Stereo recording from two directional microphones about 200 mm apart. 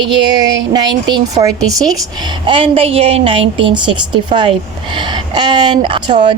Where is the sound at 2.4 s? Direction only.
25° right (ahead or behind).